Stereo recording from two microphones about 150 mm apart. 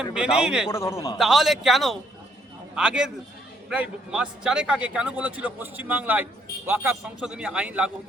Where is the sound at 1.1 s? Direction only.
Centre (ahead or behind).